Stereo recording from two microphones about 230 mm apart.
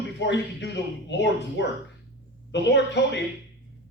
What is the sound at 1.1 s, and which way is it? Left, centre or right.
A man's voice, left.